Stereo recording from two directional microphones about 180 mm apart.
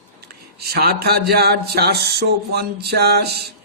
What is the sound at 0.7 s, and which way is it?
A man's voice, 60° right (ahead or behind).